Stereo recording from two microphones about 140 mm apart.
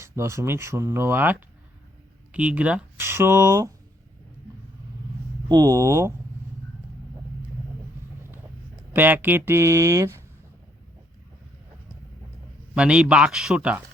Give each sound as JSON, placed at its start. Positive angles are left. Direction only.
{"t": 0.0, "sound": "speech", "side_deg": -20}
{"t": 5.5, "sound": "speech", "side_deg": -25}
{"t": 8.9, "sound": "speech", "side_deg": -15}
{"t": 12.7, "sound": "speech", "side_deg": -5}